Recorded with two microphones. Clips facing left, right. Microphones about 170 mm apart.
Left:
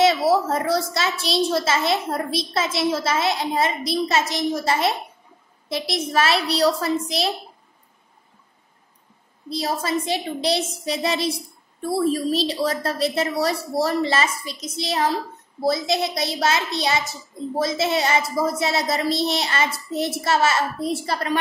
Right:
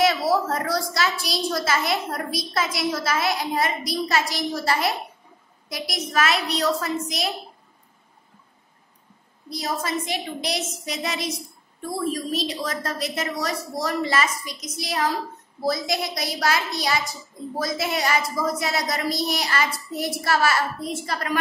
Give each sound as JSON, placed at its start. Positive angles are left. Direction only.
{"t": 0.0, "sound": "a child's voice", "side_deg": 25}
{"t": 9.5, "sound": "a woman's voice", "side_deg": 30}